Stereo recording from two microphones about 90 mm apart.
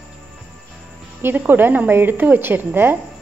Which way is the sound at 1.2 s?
20° right (ahead or behind).